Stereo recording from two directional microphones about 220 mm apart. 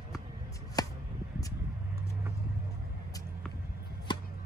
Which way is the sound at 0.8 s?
15° left (ahead or behind).